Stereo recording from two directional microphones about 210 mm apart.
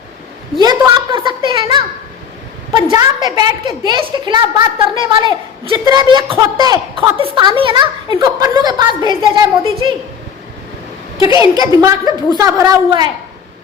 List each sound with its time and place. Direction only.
0.6 s a sound: 20° right (ahead or behind)
2.9 s a woman's voice: 20° right (ahead or behind)
11.5 s a woman's voice: 15° right (ahead or behind)